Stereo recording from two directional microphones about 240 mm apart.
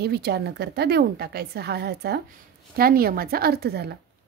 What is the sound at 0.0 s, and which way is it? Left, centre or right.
A woman's voice, right.